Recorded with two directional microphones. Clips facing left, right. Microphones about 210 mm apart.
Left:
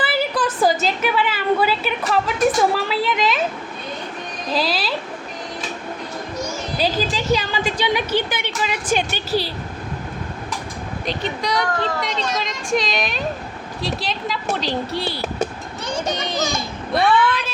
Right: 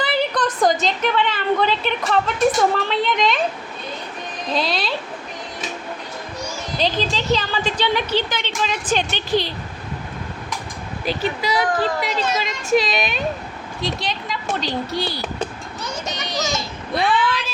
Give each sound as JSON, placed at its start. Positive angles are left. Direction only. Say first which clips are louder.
{"t": 0.0, "sound": "a woman's voice", "louder": "even", "side_deg": 5}
{"t": 4.5, "sound": "a woman's voice", "louder": "left 1 dB", "side_deg": 5}
{"t": 6.7, "sound": "a woman's voice", "louder": "even", "side_deg": 10}
{"t": 11.0, "sound": "a woman's voice", "louder": "right 2 dB", "side_deg": -5}
{"t": 15.8, "sound": "children playing", "louder": "left 5 dB", "side_deg": 30}
{"t": 16.3, "sound": "a child's voice", "louder": "left 1 dB", "side_deg": 55}